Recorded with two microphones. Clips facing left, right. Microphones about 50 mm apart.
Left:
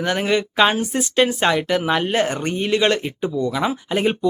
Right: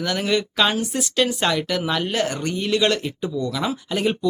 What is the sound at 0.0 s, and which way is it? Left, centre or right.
Speech, left.